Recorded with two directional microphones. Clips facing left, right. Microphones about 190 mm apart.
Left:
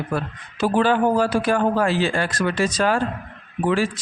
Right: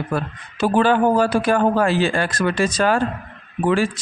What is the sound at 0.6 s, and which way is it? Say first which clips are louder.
Speech: right 2 dB; 55° right (ahead or behind).